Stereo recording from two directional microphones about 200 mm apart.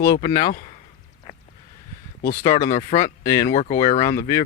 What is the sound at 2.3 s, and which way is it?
Speech, 15° left (ahead or behind).